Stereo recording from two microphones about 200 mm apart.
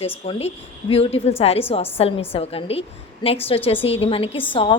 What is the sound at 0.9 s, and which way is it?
A woman's voice, 30° left (ahead or behind).